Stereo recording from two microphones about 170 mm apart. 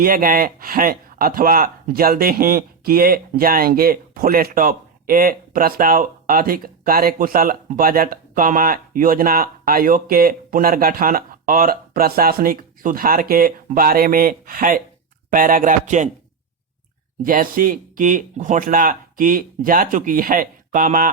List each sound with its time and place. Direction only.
0.0 s speech: 55° right (ahead or behind)
17.2 s speech: 55° right (ahead or behind)